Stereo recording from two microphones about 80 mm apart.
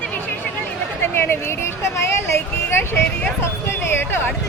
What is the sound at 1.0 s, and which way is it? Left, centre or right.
Speech, left.